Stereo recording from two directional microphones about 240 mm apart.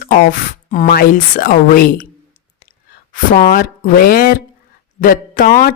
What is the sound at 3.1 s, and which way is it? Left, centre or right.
A woman's voice, left.